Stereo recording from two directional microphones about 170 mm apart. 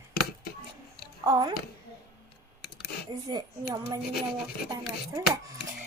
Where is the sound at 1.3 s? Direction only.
25° right (ahead or behind).